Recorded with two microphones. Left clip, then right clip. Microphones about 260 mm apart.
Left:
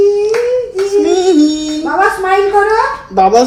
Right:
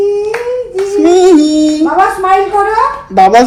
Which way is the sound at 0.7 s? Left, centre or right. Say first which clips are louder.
Right 7 dB; right.